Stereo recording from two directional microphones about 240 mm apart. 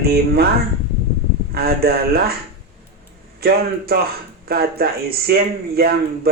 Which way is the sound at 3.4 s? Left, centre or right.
Right.